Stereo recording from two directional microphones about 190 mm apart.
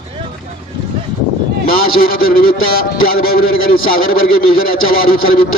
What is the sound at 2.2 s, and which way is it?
A man's voice, 50° left (ahead or behind).